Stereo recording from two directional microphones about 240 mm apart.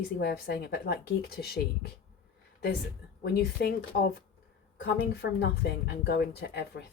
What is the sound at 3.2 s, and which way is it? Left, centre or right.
Speech, left.